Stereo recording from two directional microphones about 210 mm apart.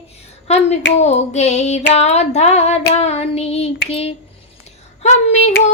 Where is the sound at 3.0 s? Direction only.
30° left (ahead or behind).